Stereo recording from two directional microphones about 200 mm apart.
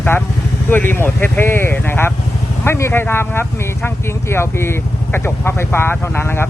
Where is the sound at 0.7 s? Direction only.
10° left (ahead or behind).